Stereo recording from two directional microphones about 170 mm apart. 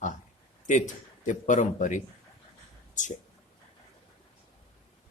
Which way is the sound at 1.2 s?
45° left (ahead or behind).